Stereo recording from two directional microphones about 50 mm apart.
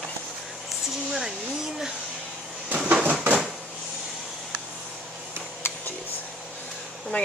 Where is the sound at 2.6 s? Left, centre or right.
Right.